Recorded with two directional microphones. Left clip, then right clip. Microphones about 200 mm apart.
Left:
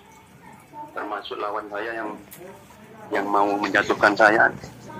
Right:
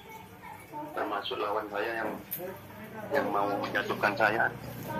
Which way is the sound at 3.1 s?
35° left (ahead or behind).